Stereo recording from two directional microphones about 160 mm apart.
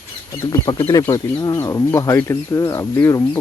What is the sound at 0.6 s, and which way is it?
Speech, 20° left (ahead or behind).